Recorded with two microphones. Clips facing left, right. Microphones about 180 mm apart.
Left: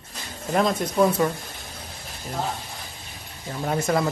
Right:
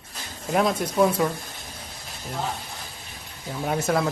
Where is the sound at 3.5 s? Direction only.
5° right (ahead or behind).